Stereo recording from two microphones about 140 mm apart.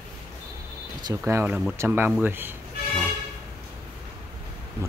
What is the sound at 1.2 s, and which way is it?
Speech, 15° right (ahead or behind).